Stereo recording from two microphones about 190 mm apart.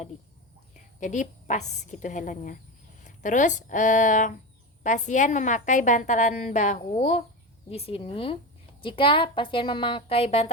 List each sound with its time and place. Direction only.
0.9 s a woman's voice: 40° left (ahead or behind)